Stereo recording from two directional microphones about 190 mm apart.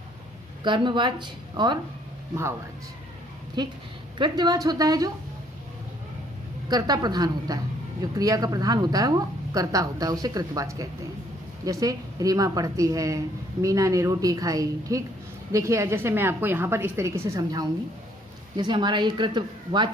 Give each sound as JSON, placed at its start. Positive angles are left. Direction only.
{"t": 0.6, "sound": "a woman's voice", "side_deg": -25}
{"t": 3.6, "sound": "a woman's voice", "side_deg": -25}
{"t": 6.7, "sound": "a woman's voice", "side_deg": -20}